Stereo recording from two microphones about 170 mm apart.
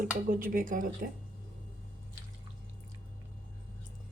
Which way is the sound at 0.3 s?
55° right (ahead or behind).